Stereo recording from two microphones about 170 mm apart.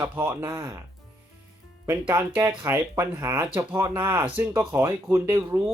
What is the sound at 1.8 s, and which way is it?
Speech, 20° right (ahead or behind).